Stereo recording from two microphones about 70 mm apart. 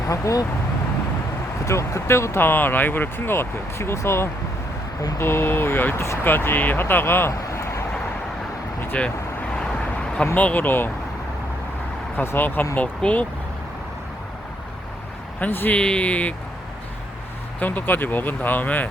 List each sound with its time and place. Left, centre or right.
0.1 s speech: left
1.6 s speech: left
7.4 s vehicle: left
9.6 s a sound: centre
10.3 s speech: left
12.2 s speech: left
12.7 s speech: centre
15.4 s speech: left
15.8 s speech: centre
17.6 s speech: left